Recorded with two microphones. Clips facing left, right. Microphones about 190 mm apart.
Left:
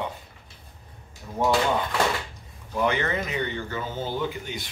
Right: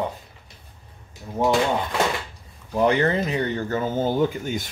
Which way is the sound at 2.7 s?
35° right (ahead or behind).